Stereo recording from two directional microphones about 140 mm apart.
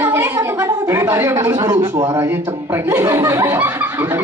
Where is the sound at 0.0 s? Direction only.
15° right (ahead or behind).